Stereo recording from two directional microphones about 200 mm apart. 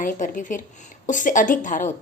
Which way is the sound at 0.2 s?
40° left (ahead or behind).